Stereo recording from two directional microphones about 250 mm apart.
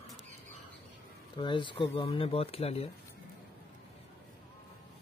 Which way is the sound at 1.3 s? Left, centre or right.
Centre.